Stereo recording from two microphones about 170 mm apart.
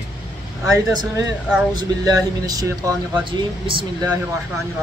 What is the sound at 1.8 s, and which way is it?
Speech, 25° right (ahead or behind).